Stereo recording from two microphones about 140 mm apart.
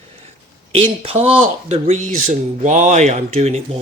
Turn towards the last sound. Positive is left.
turn(degrees=-50)  # may be behind; listen again after turning